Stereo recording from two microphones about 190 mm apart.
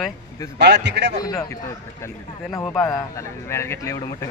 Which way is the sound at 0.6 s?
65° right (ahead or behind).